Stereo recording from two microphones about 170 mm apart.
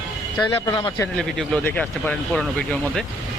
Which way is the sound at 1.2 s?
5° left (ahead or behind).